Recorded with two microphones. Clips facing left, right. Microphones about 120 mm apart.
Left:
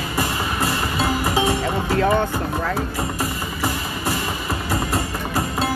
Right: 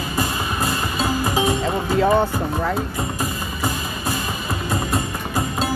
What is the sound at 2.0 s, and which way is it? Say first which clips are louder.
Music: right 3 dB; 10° right (ahead or behind).